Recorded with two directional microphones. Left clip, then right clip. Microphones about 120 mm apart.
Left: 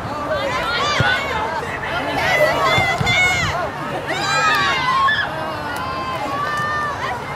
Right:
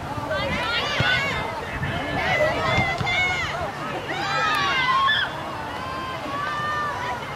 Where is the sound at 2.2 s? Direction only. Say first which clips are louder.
Left 6 dB; 40° left (ahead or behind).